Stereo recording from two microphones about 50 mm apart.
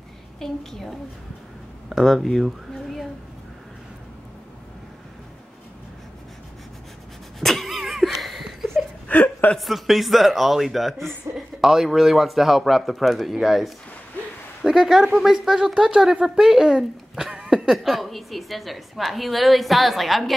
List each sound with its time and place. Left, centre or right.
0.4 s a child's voice: centre
7.3 s a sound: centre
9.1 s chuckle: left
9.6 s a child's voice: centre